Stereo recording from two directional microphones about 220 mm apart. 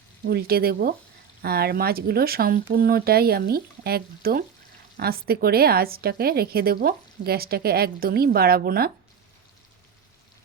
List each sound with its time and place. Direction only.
0.3 s a woman's voice: 45° right (ahead or behind)